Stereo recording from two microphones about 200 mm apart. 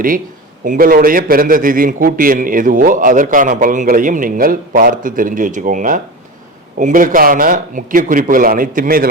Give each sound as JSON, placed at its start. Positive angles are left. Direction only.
{"t": 0.6, "sound": "a man's voice", "side_deg": -45}